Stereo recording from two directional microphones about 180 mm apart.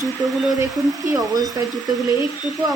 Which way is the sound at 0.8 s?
15° right (ahead or behind).